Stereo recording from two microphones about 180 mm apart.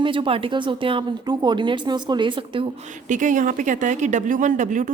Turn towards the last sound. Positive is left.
turn(degrees=-45)  # may be behind; listen again after turning